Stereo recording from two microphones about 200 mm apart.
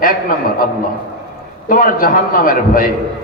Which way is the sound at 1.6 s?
45° left (ahead or behind).